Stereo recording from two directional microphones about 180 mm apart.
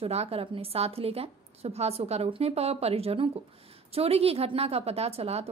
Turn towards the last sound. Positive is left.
turn(degrees=-35)  # may be behind; listen again after turning